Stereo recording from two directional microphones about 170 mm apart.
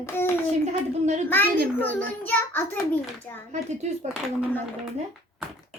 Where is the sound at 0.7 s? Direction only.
45° right (ahead or behind).